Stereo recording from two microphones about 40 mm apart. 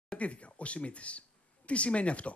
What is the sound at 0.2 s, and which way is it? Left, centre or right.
Speech, left.